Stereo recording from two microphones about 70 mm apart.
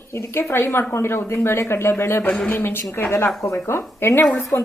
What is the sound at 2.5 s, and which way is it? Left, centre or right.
A woman's voice, left.